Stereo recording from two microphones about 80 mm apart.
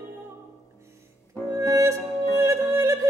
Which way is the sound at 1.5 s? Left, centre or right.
Right.